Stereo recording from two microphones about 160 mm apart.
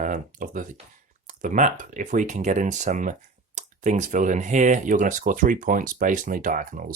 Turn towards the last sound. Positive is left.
turn(degrees=-55)  # may be behind; listen again after turning